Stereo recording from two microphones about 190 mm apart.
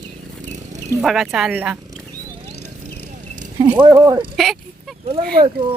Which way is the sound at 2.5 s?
40° right (ahead or behind).